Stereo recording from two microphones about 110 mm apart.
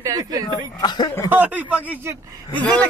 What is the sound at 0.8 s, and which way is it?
Speech, 40° left (ahead or behind).